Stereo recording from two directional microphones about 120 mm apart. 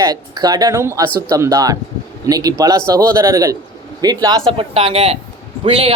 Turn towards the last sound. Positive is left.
turn(degrees=-55)  # may be behind; listen again after turning